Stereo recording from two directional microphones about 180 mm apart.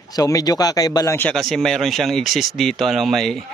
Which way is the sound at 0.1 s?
20° left (ahead or behind).